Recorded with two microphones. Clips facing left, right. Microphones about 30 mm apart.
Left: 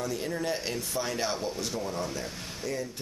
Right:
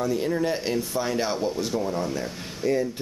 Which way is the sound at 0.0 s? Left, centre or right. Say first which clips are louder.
Right 7 dB; centre.